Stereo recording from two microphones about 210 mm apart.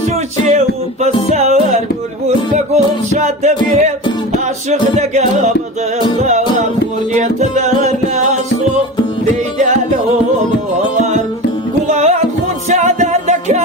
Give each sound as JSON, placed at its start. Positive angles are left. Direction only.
{"t": 1.0, "sound": "music", "side_deg": -30}
{"t": 11.9, "sound": "music", "side_deg": -35}